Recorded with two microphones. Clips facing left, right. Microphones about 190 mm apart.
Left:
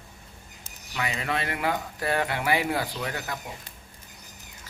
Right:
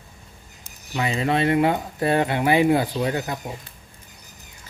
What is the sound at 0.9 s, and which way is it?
Speech, 25° right (ahead or behind).